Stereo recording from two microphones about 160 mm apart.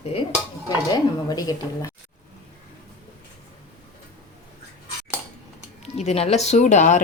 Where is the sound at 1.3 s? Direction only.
25° left (ahead or behind).